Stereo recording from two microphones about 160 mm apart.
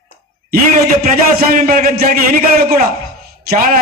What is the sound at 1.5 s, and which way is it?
Speech, 60° right (ahead or behind).